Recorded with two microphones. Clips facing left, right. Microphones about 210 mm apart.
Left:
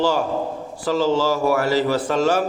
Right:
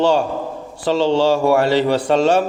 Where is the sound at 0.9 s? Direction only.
70° right (ahead or behind).